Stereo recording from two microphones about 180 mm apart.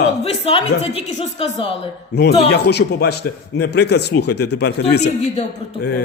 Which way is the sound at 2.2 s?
65° left (ahead or behind).